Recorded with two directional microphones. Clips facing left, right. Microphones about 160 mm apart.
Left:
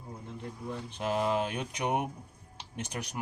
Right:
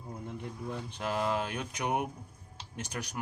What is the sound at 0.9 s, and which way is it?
Speech, 20° left (ahead or behind).